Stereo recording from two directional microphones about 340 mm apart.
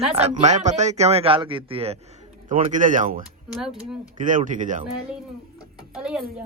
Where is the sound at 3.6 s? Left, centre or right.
Centre.